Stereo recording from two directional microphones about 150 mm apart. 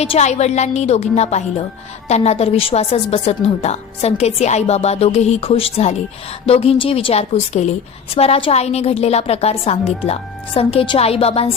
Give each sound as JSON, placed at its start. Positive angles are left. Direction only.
{"t": 0.0, "sound": "a woman's voice", "side_deg": 45}